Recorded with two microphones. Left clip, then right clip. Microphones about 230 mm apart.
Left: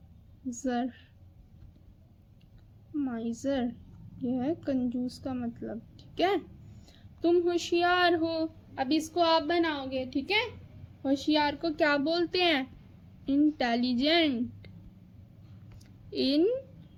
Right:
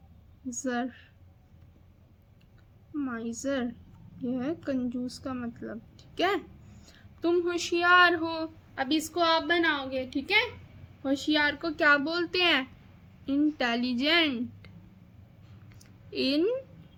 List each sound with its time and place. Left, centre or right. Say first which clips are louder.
0.5 s a woman's voice: even; centre
2.9 s a woman's voice: even; centre
15.8 s a sound: even; centre